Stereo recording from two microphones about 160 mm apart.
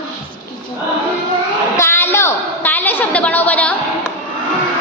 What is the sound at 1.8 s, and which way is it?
A woman's voice, 15° left (ahead or behind).